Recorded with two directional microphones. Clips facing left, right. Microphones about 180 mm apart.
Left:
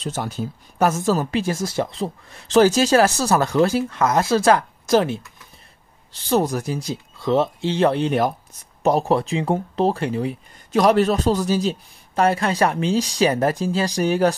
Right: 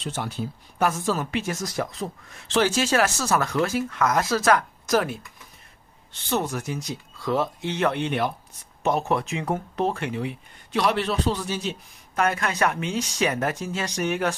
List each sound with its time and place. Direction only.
0.0 s speech: 40° left (ahead or behind)